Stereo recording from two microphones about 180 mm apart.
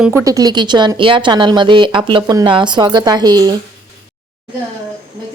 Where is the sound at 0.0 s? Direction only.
15° right (ahead or behind).